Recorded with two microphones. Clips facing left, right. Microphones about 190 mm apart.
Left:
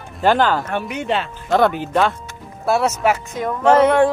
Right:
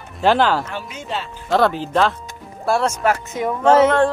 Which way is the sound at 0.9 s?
65° left (ahead or behind).